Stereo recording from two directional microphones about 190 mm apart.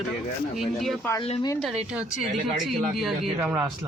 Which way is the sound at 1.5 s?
5° right (ahead or behind).